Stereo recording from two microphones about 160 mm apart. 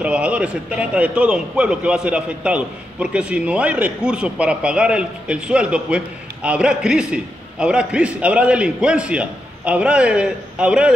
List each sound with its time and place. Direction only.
0.0 s a man's voice: 5° right (ahead or behind)